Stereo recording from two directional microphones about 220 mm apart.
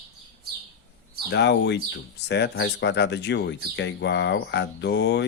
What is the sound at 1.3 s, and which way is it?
Speech, 50° left (ahead or behind).